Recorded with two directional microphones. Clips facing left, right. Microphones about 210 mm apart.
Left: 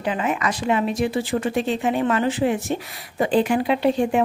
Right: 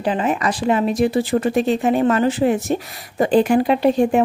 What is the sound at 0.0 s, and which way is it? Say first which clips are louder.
A woman's voice: right 4 dB; 35° right (ahead or behind).